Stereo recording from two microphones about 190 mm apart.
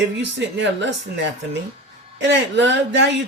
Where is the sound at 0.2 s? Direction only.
70° right (ahead or behind).